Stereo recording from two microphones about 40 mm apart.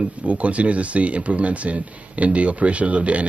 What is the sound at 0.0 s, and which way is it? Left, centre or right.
Speech, right.